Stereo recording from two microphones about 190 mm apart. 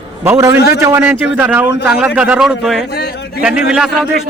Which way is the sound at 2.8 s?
60° left (ahead or behind).